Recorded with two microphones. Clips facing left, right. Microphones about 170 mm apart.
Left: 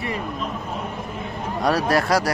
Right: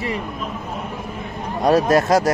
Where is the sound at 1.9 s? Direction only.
20° right (ahead or behind).